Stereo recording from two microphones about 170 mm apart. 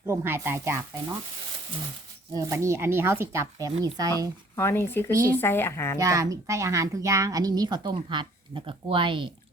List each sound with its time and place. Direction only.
0.1 s speech: 15° right (ahead or behind)
2.3 s speech: 15° right (ahead or behind)
4.5 s speech: 15° left (ahead or behind)
6.0 s speech: 20° right (ahead or behind)